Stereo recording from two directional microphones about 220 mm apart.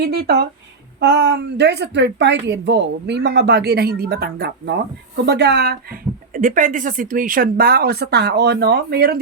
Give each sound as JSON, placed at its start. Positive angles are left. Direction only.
{"t": 0.0, "sound": "speech", "side_deg": -45}